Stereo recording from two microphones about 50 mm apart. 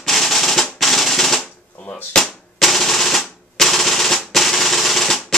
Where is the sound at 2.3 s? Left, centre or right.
Centre.